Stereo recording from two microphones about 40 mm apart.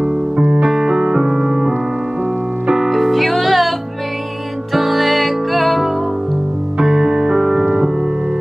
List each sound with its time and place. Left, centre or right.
0.0 s music: right
0.6 s music: centre
2.7 s music: centre
4.7 s music: centre
6.8 s music: centre